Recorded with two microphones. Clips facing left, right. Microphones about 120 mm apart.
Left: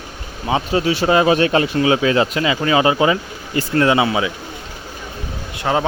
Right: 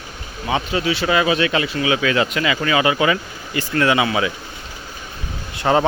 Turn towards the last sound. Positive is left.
turn(degrees=0)  # may be behind; listen again after turning